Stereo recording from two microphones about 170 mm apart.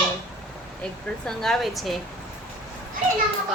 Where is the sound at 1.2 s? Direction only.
Centre (ahead or behind).